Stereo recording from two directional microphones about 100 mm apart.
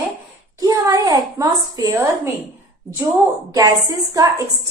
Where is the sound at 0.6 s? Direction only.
35° right (ahead or behind).